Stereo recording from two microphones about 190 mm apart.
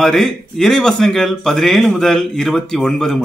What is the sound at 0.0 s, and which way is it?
Speech, centre (ahead or behind).